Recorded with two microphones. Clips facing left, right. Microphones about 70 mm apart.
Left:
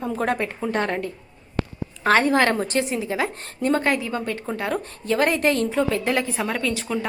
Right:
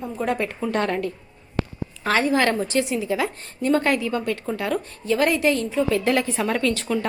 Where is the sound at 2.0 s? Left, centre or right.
Left.